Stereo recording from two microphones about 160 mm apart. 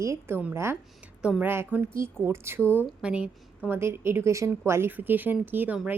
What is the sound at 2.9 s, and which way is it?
Speech, 5° right (ahead or behind).